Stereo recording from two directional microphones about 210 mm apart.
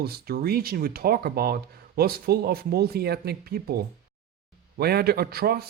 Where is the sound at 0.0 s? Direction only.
45° right (ahead or behind).